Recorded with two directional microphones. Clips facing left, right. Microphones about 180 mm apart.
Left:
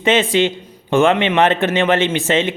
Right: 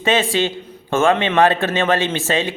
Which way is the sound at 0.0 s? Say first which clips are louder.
Left 3 dB; 20° left (ahead or behind).